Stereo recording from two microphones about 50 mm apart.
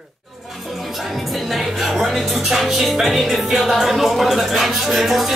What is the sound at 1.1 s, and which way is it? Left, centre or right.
Music, centre.